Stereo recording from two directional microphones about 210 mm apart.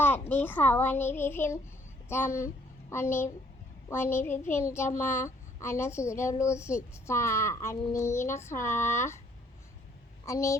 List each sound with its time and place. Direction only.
0.0 s a child's voice: 10° left (ahead or behind)
10.2 s a child's voice: 15° left (ahead or behind)